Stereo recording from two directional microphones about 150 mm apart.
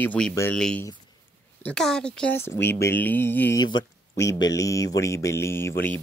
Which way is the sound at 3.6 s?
30° left (ahead or behind).